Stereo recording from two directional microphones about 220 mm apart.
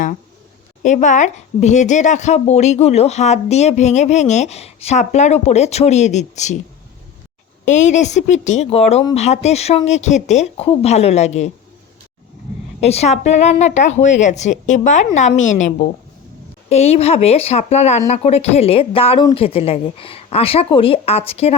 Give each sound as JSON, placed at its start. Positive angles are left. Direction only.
{"t": 0.8, "sound": "speech", "side_deg": 35}
{"t": 7.6, "sound": "speech", "side_deg": 35}
{"t": 12.8, "sound": "speech", "side_deg": 30}